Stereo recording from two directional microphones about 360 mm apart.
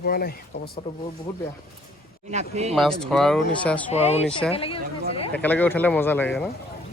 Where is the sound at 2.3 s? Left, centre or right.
Centre.